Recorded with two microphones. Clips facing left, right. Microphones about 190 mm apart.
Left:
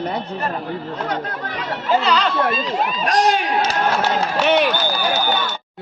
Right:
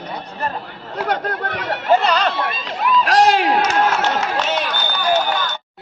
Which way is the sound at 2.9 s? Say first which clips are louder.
Right 5 dB; 70° right (ahead or behind).